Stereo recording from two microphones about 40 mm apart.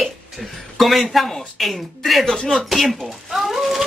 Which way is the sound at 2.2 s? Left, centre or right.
Centre.